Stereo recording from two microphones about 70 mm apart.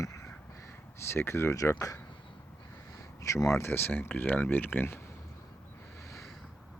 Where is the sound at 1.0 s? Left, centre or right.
Left.